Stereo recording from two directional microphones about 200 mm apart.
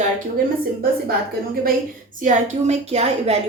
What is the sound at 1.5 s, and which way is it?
A woman's voice, 45° right (ahead or behind).